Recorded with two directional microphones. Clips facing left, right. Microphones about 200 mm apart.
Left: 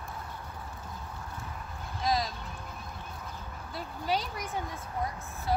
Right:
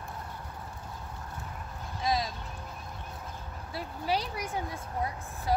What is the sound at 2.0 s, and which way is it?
Vehicle, centre (ahead or behind).